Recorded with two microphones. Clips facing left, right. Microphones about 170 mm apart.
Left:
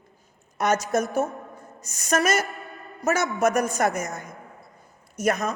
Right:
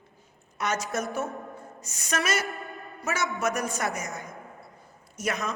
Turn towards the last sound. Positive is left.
turn(degrees=45)  # may be behind; listen again after turning